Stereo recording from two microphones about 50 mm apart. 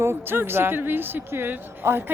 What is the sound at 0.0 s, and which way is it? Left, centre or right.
Speech, right.